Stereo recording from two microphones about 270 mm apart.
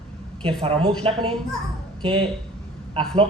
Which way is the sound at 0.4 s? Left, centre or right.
Right.